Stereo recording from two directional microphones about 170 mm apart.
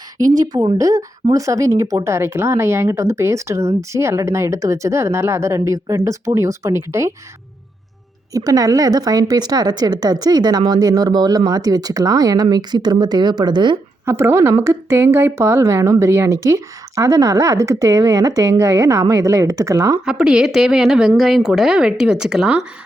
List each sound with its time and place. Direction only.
0.3 s speech: 20° right (ahead or behind)
8.3 s speech: 20° right (ahead or behind)
14.0 s speech: 15° right (ahead or behind)
20.1 s speech: 5° right (ahead or behind)